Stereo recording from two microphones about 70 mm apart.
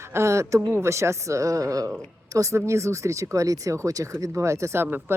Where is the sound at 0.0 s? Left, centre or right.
Right.